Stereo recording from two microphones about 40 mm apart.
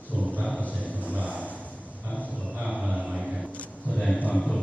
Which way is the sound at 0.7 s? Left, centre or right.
Right.